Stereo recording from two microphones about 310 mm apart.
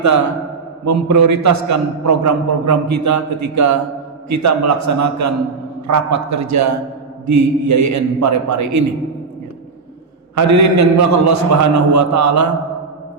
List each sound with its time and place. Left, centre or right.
0.9 s a man's voice: right
10.3 s a man's voice: right